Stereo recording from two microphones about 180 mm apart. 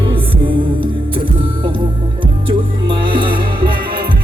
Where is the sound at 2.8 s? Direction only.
25° right (ahead or behind).